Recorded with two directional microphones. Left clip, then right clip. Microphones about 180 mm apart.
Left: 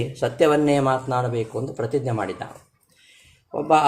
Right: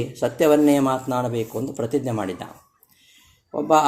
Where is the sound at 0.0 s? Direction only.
25° right (ahead or behind).